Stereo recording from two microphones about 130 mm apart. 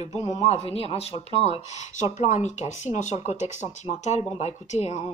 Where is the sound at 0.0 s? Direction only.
60° left (ahead or behind).